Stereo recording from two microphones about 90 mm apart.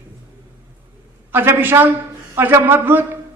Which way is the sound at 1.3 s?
20° right (ahead or behind).